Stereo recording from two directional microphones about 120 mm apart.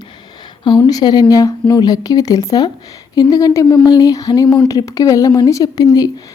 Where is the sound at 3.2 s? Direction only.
30° left (ahead or behind).